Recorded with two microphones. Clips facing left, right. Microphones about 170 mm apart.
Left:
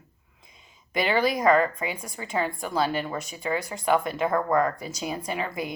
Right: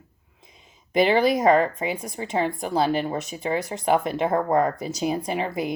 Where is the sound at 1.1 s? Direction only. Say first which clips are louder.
Right 2 dB; 40° right (ahead or behind).